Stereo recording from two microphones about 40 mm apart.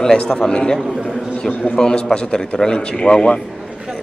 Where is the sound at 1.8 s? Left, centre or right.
Centre.